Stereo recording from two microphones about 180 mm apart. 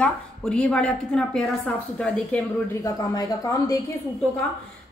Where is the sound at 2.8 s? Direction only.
20° left (ahead or behind).